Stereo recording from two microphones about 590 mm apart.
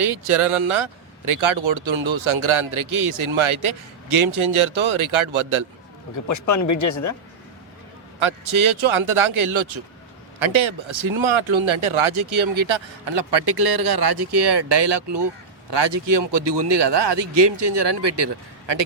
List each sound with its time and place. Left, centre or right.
0.0 s speech: right
6.2 s speech: left
8.2 s speech: right